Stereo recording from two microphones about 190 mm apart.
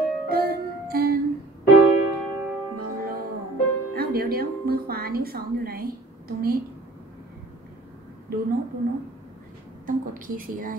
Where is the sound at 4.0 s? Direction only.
50° right (ahead or behind).